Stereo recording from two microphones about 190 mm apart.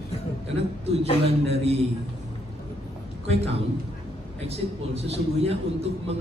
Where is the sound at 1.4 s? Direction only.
35° right (ahead or behind).